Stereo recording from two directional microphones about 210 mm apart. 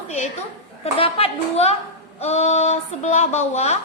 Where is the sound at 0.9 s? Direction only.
25° left (ahead or behind).